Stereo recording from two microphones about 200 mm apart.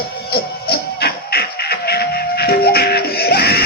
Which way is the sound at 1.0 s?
55° left (ahead or behind).